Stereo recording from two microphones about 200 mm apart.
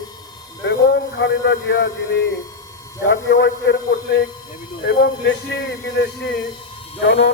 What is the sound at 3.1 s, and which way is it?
A man's voice, 65° left (ahead or behind).